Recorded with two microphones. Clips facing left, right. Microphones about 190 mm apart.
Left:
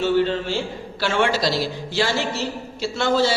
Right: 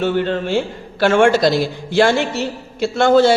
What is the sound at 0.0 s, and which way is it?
A man's voice, 55° right (ahead or behind).